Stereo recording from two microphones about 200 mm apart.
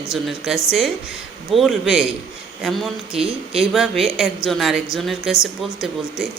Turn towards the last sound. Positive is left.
turn(degrees=0)  # may be behind; listen again after turning